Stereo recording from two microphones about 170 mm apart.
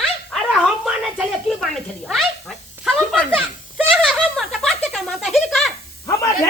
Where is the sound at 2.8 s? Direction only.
Centre (ahead or behind).